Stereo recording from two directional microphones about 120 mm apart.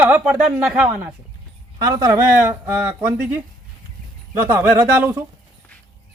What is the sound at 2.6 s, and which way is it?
Speech, 15° right (ahead or behind).